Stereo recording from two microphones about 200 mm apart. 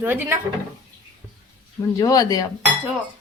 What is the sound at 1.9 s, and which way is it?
Speech, 15° left (ahead or behind).